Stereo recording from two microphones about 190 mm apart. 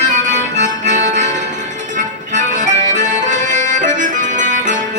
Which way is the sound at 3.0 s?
40° right (ahead or behind).